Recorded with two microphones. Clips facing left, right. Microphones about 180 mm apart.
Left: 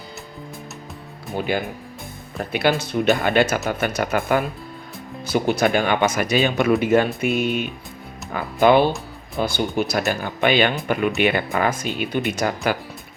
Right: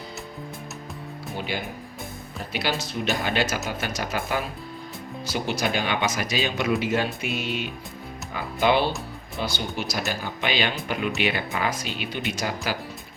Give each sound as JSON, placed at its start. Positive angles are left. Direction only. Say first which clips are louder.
{"t": 1.5, "sound": "speech", "louder": "left 7 dB", "side_deg": 55}